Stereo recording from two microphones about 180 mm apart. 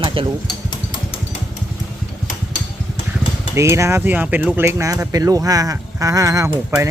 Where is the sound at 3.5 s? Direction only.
15° right (ahead or behind).